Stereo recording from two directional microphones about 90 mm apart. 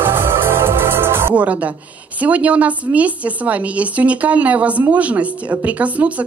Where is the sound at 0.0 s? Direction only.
25° right (ahead or behind).